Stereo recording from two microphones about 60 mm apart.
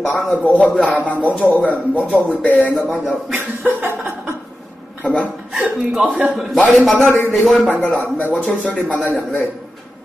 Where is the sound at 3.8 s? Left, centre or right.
Right.